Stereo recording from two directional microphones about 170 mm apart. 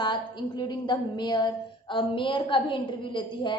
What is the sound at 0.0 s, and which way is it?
A woman's voice, 25° left (ahead or behind).